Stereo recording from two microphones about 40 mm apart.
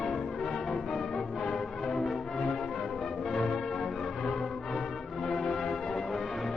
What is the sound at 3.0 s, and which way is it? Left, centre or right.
Music, centre.